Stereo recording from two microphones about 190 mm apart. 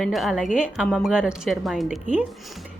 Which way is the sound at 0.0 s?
Centre (ahead or behind).